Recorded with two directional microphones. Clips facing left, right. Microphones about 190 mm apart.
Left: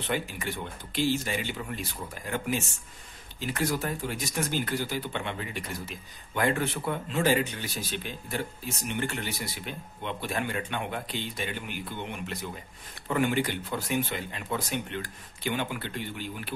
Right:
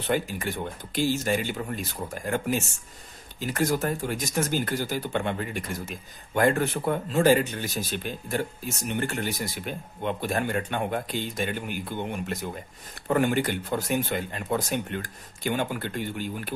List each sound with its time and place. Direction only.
0.1 s speech: 45° right (ahead or behind)